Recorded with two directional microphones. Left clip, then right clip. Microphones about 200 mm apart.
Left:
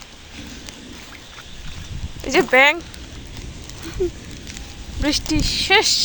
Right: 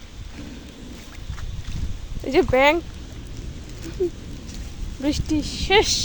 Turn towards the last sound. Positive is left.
turn(degrees=-15)  # may be behind; listen again after turning